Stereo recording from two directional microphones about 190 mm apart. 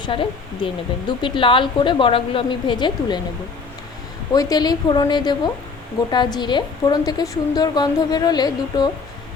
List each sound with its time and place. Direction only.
0.0 s speech: 25° left (ahead or behind)
4.3 s speech: 20° left (ahead or behind)